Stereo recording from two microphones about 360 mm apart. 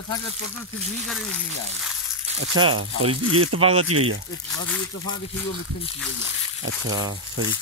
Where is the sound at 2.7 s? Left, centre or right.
Right.